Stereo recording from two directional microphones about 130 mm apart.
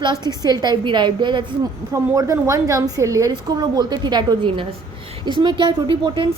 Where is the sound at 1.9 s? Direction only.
25° right (ahead or behind).